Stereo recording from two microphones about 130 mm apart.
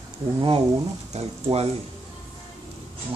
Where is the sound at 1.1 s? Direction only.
50° right (ahead or behind).